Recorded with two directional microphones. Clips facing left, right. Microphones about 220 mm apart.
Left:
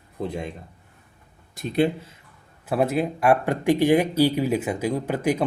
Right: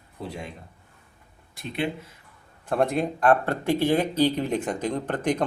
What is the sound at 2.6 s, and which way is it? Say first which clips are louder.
Speech: left 1 dB; 5° left (ahead or behind).